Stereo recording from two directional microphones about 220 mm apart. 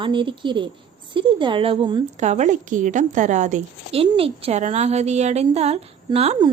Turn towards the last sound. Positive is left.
turn(degrees=-25)  # may be behind; listen again after turning